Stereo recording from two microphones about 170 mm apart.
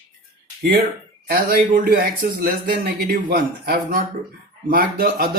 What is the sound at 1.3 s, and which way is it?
Speech, 55° right (ahead or behind).